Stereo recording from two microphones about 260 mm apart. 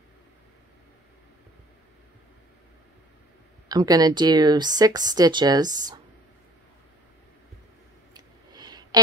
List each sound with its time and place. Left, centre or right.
3.6 s speech: centre
8.1 s clicking: centre